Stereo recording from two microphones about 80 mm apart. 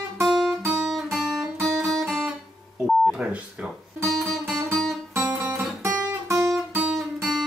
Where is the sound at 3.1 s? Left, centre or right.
Centre.